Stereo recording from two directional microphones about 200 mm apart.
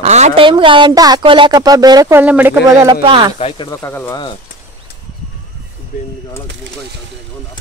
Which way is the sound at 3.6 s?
15° left (ahead or behind).